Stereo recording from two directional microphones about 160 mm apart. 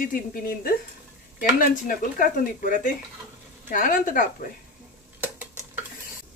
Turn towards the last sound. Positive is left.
turn(degrees=-10)  # may be behind; listen again after turning